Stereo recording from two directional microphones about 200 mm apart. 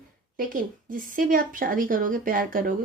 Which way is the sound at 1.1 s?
45° right (ahead or behind).